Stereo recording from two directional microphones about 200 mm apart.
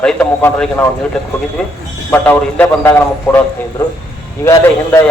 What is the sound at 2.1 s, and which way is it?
A man's voice, 10° left (ahead or behind).